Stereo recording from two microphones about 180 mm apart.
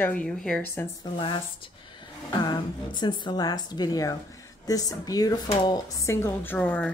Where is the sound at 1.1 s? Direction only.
25° left (ahead or behind).